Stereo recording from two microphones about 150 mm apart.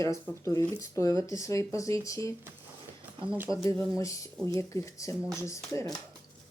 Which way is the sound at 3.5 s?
30° right (ahead or behind).